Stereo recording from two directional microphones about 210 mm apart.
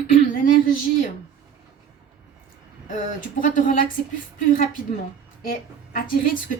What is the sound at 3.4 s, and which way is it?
Speech, 40° left (ahead or behind).